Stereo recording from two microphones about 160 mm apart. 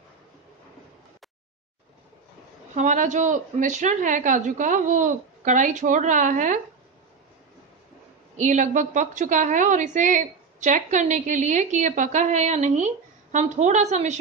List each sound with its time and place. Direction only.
2.7 s a woman's voice: 50° right (ahead or behind)
8.4 s a woman's voice: 50° right (ahead or behind)